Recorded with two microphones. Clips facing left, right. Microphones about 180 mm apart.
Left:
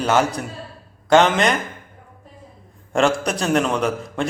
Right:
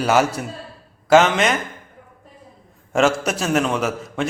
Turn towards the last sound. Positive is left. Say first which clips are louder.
# left 1 dB
turn(degrees=-5)  # may be behind; listen again after turning